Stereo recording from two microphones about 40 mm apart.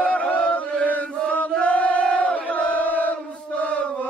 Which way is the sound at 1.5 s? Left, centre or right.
Left.